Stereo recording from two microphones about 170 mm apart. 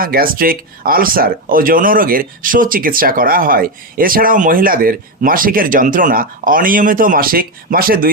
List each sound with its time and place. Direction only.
0.0 s speech: 60° right (ahead or behind)